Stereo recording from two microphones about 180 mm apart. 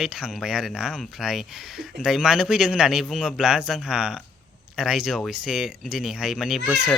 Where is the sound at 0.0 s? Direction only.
5° right (ahead or behind).